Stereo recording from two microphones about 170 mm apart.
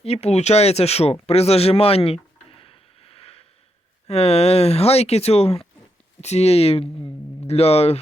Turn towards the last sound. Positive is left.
turn(degrees=35)  # may be behind; listen again after turning